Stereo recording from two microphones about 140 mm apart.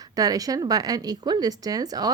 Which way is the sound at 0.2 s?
25° right (ahead or behind).